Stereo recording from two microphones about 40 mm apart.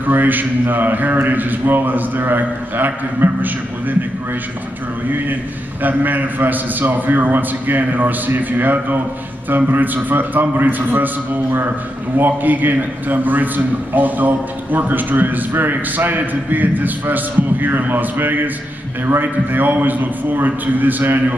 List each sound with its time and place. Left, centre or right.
0.0 s a man's voice: right
5.1 s a man's voice: right
10.0 s a man's voice: right
12.2 s a man's voice: right